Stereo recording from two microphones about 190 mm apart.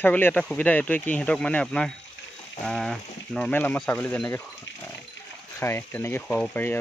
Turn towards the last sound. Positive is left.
turn(degrees=10)  # may be behind; listen again after turning